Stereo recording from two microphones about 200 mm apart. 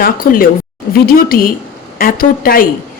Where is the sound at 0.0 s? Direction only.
45° left (ahead or behind).